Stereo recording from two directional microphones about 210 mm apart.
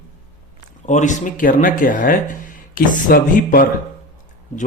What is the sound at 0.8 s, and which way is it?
Speech, 35° left (ahead or behind).